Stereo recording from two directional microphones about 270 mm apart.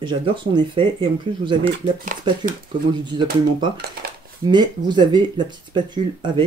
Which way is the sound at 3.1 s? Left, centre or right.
Centre.